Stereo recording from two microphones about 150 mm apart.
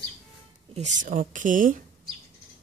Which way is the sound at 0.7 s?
55° right (ahead or behind).